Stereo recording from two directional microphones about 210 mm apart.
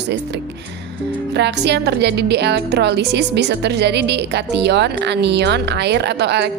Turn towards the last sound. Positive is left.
turn(degrees=-55)  # may be behind; listen again after turning